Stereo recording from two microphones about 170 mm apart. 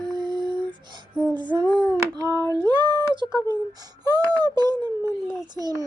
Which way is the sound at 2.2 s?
25° right (ahead or behind).